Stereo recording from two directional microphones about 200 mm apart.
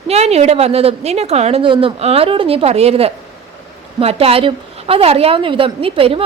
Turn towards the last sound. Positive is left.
turn(degrees=-25)  # may be behind; listen again after turning